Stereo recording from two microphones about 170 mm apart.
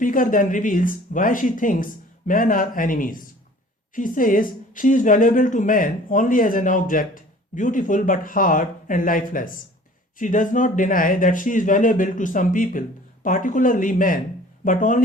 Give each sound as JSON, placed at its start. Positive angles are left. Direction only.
{"t": 0.0, "sound": "a woman's voice", "side_deg": 55}